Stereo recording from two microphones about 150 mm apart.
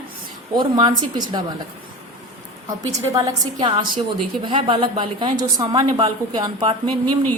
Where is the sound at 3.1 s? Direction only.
30° right (ahead or behind).